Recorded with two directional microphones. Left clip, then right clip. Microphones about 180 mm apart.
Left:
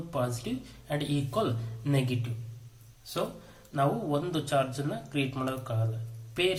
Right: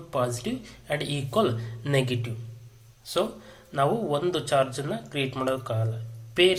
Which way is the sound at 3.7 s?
15° right (ahead or behind).